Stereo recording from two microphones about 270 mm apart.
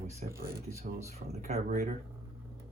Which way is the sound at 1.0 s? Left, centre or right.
Right.